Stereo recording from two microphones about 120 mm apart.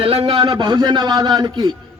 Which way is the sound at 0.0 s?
50° right (ahead or behind).